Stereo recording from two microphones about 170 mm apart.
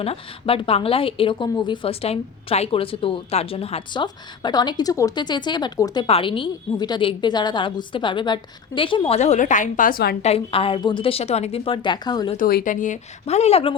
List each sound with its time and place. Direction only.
0.0 s a woman's voice: 35° left (ahead or behind); by 10.2 s 65° left (ahead or behind)
10.2 s a woman's voice: 35° left (ahead or behind)
12.5 s speech: 60° left (ahead or behind); by 13.7 s 35° left (ahead or behind)